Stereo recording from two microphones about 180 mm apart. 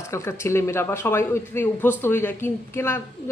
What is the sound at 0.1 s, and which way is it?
A man's voice, 15° left (ahead or behind).